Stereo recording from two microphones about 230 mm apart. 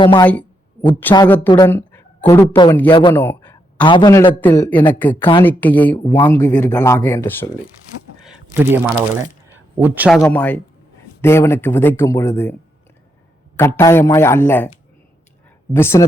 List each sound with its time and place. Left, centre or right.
0.0 s speech: left
0.9 s speech: centre
2.9 s speech: left
3.2 s a sound: centre
3.8 s speech: centre
6.0 s speech: left
6.2 s speech: centre
8.2 s a man's voice: centre
13.6 s speech: centre
15.7 s speech: centre